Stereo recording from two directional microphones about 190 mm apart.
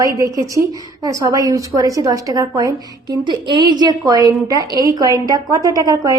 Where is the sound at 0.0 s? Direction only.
15° right (ahead or behind).